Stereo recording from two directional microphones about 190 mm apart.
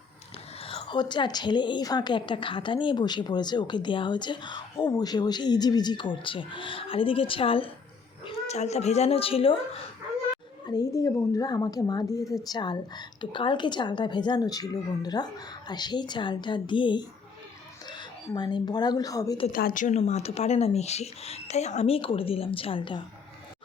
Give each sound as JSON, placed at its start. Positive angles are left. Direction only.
{"t": 0.6, "sound": "a woman's voice", "side_deg": 30}
{"t": 10.7, "sound": "a woman's voice", "side_deg": 20}
{"t": 18.3, "sound": "a woman's voice", "side_deg": 20}
{"t": 19.5, "sound": "speech", "side_deg": 45}